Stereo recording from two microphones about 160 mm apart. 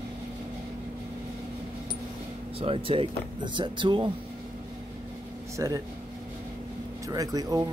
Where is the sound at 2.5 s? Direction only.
35° right (ahead or behind).